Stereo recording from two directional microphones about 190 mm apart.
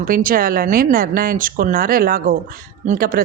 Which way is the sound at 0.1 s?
45° right (ahead or behind).